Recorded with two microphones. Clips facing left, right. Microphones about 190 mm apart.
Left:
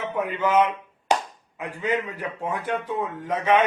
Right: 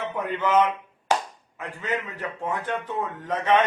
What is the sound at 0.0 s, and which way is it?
Speech, 10° left (ahead or behind).